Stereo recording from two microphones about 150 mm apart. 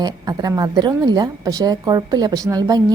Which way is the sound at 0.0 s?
25° right (ahead or behind).